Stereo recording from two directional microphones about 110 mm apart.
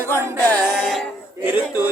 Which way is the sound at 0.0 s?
25° right (ahead or behind).